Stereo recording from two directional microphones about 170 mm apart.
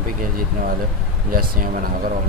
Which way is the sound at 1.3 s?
55° right (ahead or behind).